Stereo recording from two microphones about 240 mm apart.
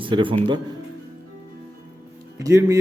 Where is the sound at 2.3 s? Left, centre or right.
Centre.